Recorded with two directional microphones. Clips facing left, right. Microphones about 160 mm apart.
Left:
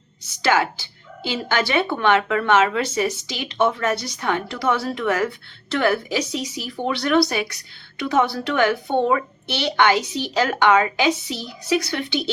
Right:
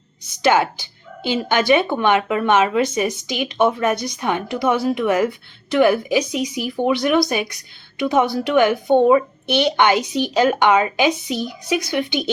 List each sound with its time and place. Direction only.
0.4 s speech: 20° right (ahead or behind)